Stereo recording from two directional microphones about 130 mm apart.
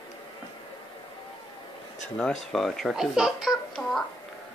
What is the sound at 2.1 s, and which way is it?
Speech, 5° left (ahead or behind).